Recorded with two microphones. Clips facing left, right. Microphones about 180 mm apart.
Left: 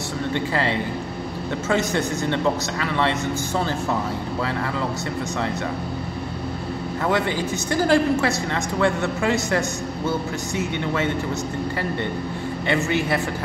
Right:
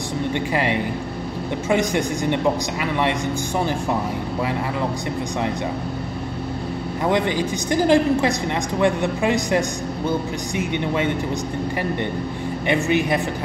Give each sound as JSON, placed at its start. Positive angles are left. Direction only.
{"t": 0.3, "sound": "a woman's voice", "side_deg": -15}
{"t": 7.1, "sound": "a woman's voice", "side_deg": -20}
{"t": 12.6, "sound": "a woman's voice", "side_deg": -15}